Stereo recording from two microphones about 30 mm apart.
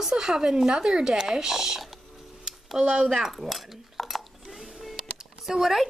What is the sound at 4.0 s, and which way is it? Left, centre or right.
Dishes, centre.